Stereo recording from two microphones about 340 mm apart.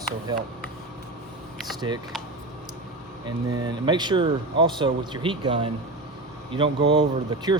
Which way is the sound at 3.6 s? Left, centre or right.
Centre.